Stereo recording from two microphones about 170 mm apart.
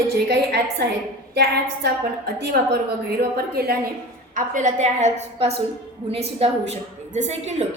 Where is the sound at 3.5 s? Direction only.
65° right (ahead or behind).